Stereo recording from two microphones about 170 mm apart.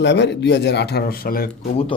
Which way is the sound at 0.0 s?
90° left.